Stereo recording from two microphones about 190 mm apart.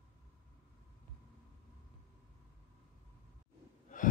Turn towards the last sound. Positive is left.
turn(degrees=45)  # may be behind; listen again after turning